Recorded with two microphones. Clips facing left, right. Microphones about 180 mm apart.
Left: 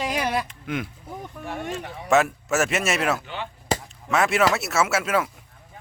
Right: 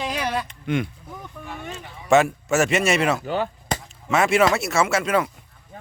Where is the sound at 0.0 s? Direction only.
10° left (ahead or behind).